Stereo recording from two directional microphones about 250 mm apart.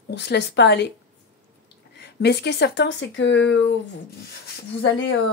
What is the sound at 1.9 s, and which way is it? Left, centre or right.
A woman's voice, left.